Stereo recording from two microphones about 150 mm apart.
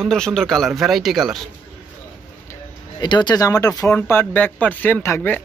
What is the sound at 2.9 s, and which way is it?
Speech, 30° left (ahead or behind).